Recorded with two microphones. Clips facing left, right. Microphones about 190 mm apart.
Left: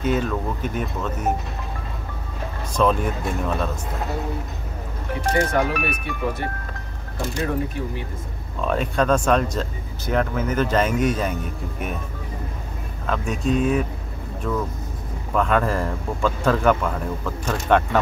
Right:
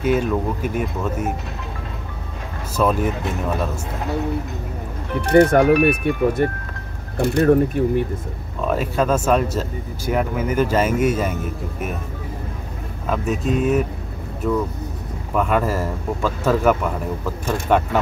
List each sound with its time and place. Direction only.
0.0 s speech: 10° right (ahead or behind)
2.7 s speech: 5° right (ahead or behind)
5.2 s speech: 60° right (ahead or behind)
7.2 s speech: 65° right (ahead or behind)
8.6 s speech: 5° right (ahead or behind)
13.0 s speech: 5° right (ahead or behind)